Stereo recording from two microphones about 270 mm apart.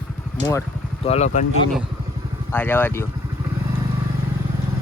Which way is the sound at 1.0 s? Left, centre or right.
Left.